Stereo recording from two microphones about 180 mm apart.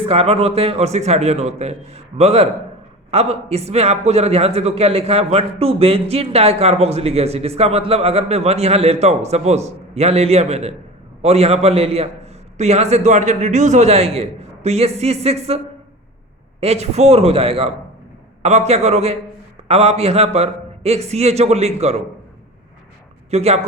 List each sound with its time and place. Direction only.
0.0 s a man's voice: 35° right (ahead or behind)
23.3 s a man's voice: 35° right (ahead or behind)